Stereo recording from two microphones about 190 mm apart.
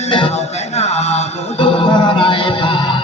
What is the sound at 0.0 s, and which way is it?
Music, 30° left (ahead or behind).